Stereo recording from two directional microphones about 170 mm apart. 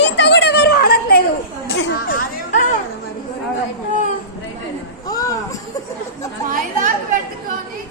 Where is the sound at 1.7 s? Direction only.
80° left.